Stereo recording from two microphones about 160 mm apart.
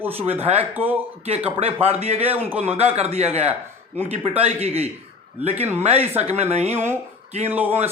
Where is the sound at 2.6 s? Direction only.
40° right (ahead or behind).